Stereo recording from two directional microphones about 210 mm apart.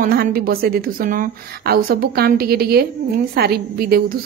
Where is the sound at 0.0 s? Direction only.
45° right (ahead or behind).